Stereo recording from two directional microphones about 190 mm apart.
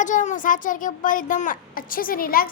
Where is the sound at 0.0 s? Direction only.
40° left (ahead or behind).